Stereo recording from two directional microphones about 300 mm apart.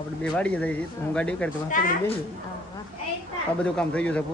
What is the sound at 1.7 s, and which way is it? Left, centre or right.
Speech, left.